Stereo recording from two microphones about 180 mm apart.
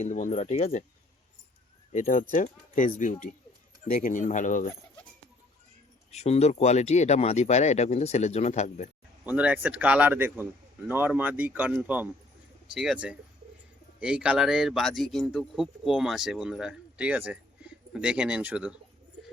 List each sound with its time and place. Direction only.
0.0 s speech: 45° left (ahead or behind)
1.9 s speech: 50° left (ahead or behind)
6.1 s speech: 35° left (ahead or behind)
9.2 s speech: 5° right (ahead or behind)